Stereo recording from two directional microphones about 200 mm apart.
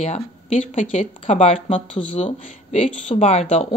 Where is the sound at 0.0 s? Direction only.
35° left (ahead or behind).